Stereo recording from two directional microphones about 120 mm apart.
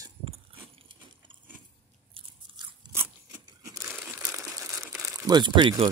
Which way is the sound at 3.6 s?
25° right (ahead or behind).